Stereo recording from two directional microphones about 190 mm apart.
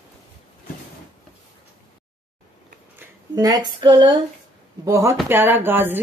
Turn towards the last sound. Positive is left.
turn(degrees=-10)  # may be behind; listen again after turning